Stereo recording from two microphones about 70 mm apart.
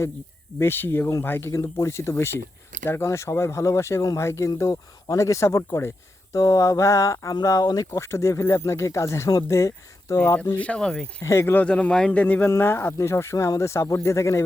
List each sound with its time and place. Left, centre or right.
0.6 s speech: left
1.5 s speech: left
6.3 s speech: left
7.3 s speech: left
7.9 s speech: left
10.2 s speech: left
10.6 s a man's voice: centre
11.2 s speech: left
11.5 s a man's voice: centre
12.5 s speech: left